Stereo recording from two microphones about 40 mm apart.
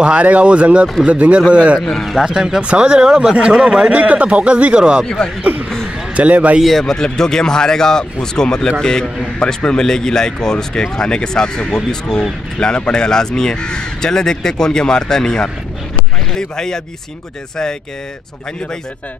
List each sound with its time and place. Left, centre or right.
0.0 s speech: right
2.2 s speech: centre
2.6 s speech: right
3.3 s a man's voice: right
5.4 s speech: right
6.1 s a man's voice: right
6.8 s speech: centre